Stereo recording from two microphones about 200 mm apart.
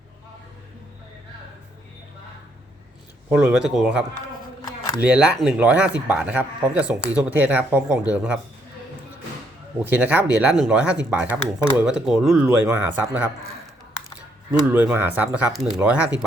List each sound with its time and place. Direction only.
3.2 s speech: 5° right (ahead or behind)
9.8 s speech: 5° right (ahead or behind)
14.6 s speech: 10° right (ahead or behind)